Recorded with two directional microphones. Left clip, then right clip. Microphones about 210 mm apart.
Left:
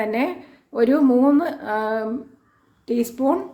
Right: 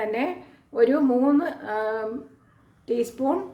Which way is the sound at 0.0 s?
25° left (ahead or behind).